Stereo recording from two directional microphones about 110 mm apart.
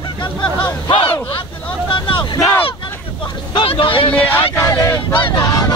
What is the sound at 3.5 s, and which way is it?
Speech, 55° left (ahead or behind).